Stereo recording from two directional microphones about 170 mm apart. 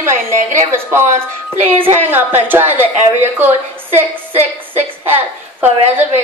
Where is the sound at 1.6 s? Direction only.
40° right (ahead or behind).